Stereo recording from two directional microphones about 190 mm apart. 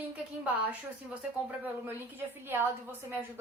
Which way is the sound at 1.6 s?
10° right (ahead or behind).